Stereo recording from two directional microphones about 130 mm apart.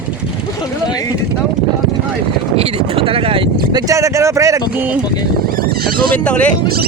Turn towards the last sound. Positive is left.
turn(degrees=10)  # may be behind; listen again after turning